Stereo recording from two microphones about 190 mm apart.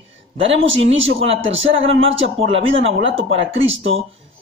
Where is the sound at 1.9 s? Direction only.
90° right.